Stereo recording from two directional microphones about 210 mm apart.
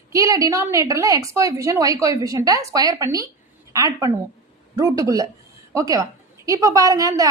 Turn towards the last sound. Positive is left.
turn(degrees=-15)  # may be behind; listen again after turning